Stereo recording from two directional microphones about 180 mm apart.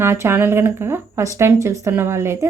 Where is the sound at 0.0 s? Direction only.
15° right (ahead or behind).